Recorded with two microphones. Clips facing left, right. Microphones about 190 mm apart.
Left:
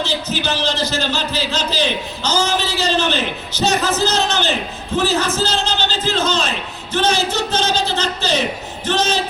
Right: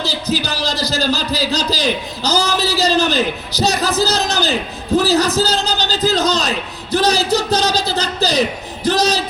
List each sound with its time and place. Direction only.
0.0 s a man's voice: 35° right (ahead or behind)